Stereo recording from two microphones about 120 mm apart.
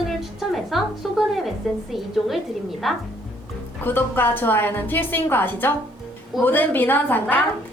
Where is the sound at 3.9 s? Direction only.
15° left (ahead or behind).